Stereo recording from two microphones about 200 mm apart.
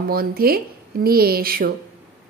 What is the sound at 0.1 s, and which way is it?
A woman's voice, 50° right (ahead or behind).